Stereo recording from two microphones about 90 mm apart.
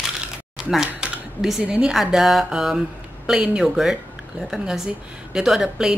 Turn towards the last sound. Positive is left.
turn(degrees=-5)  # may be behind; listen again after turning